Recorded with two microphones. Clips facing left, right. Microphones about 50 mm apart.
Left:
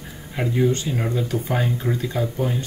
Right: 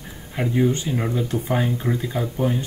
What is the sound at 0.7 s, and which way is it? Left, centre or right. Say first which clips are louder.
Speech: even; centre.